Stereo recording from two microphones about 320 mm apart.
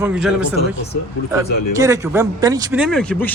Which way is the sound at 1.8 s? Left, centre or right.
Centre.